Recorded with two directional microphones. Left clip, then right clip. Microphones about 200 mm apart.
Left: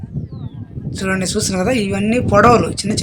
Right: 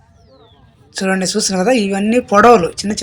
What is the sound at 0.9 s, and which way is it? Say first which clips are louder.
Speech: right 3 dB; 10° right (ahead or behind).